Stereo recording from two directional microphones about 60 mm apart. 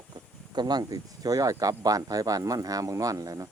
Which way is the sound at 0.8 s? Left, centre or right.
Right.